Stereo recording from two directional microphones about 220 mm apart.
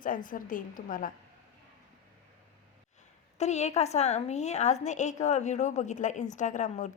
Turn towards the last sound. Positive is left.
turn(degrees=35)  # may be behind; listen again after turning